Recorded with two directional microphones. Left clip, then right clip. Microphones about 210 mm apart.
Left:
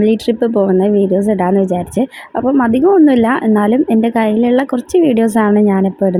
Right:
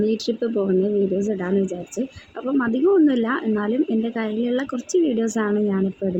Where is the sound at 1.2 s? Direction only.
30° left (ahead or behind).